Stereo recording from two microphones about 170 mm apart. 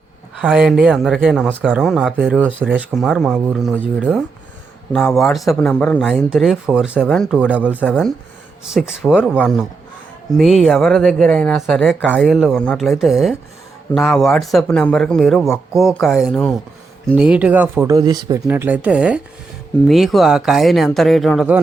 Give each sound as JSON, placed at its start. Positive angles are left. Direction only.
{"t": 0.3, "sound": "speech", "side_deg": 0}
{"t": 4.9, "sound": "speech", "side_deg": 5}
{"t": 7.9, "sound": "speech", "side_deg": 0}
{"t": 12.1, "sound": "speech", "side_deg": -5}
{"t": 18.4, "sound": "speech", "side_deg": -10}